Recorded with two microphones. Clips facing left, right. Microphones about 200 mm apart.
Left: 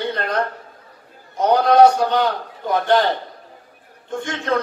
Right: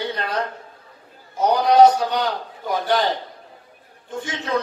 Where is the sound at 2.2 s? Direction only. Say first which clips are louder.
Left 4 dB; 55° left (ahead or behind).